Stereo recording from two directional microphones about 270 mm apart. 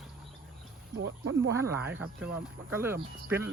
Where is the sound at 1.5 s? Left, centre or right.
Centre.